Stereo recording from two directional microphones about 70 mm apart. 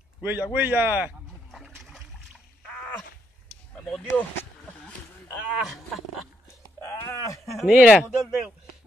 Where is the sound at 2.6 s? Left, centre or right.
Centre.